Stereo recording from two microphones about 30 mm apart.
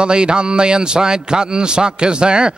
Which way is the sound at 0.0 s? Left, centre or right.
Right.